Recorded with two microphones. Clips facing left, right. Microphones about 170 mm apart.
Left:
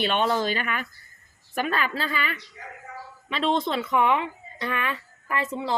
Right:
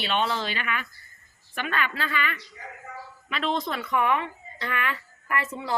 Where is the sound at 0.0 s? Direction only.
50° left (ahead or behind).